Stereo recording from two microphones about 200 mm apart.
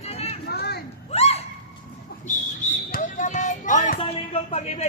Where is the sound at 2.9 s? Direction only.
40° left (ahead or behind).